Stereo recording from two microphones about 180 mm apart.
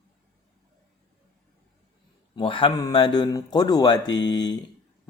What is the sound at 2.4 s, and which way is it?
A man's voice, 30° left (ahead or behind).